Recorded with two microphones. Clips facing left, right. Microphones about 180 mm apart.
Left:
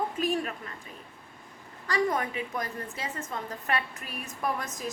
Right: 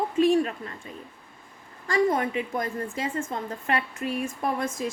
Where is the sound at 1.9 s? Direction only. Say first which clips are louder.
Right 5 dB; 25° right (ahead or behind).